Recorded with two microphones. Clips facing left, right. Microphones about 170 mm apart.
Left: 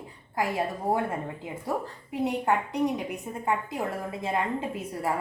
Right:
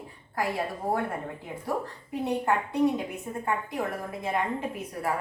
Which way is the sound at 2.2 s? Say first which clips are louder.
Left 1 dB; 15° left (ahead or behind).